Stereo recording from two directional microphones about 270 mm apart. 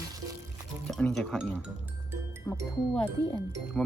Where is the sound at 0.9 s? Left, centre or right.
Centre.